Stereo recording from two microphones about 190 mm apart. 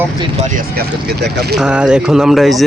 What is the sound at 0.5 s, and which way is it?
Speech, 55° right (ahead or behind).